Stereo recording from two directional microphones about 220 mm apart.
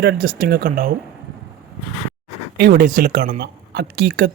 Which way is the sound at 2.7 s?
35° right (ahead or behind).